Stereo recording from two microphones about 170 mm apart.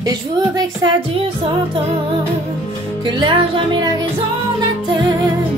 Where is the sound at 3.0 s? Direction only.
30° right (ahead or behind).